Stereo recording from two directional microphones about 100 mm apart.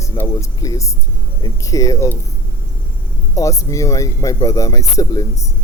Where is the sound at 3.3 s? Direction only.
30° left (ahead or behind).